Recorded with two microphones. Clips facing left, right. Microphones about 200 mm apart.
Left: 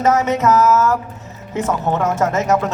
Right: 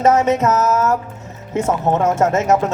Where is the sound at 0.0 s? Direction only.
30° right (ahead or behind).